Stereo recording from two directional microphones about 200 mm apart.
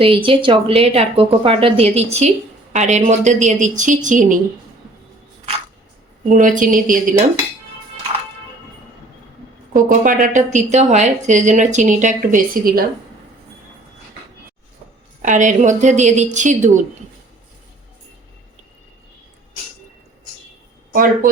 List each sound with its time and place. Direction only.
0.0 s a woman's voice: 25° right (ahead or behind)
6.2 s a woman's voice: 40° right (ahead or behind)
9.7 s a woman's voice: 40° right (ahead or behind)
15.2 s a woman's voice: 40° right (ahead or behind)
20.9 s speech: 45° right (ahead or behind)